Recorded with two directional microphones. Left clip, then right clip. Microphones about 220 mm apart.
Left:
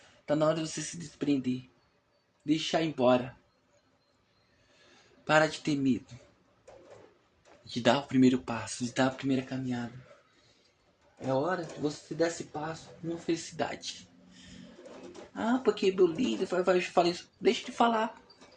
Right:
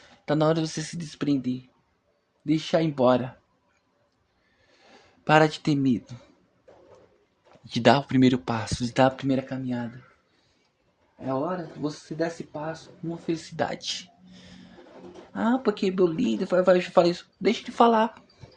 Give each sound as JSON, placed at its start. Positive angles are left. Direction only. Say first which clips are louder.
{"t": 0.3, "sound": "speech", "louder": "right 4 dB", "side_deg": -50}
{"t": 2.5, "sound": "speech", "louder": "right 5 dB", "side_deg": -55}
{"t": 5.2, "sound": "speech", "louder": "right 6 dB", "side_deg": -60}
{"t": 7.7, "sound": "speech", "louder": "right 7 dB", "side_deg": -60}
{"t": 11.3, "sound": "speech", "louder": "right 2 dB", "side_deg": -40}
{"t": 13.2, "sound": "speech", "louder": "right 5 dB", "side_deg": -55}
{"t": 15.4, "sound": "speech", "louder": "right 3 dB", "side_deg": -50}